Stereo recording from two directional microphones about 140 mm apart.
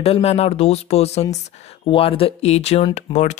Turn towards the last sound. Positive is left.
turn(degrees=55)  # may be behind; listen again after turning